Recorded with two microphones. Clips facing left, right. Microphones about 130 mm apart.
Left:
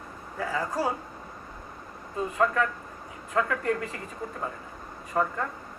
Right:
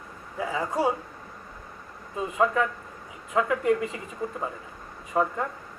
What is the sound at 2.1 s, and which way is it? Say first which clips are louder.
Speech: right 1 dB; 15° right (ahead or behind).